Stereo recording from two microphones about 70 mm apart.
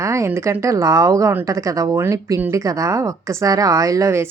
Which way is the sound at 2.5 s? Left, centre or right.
Right.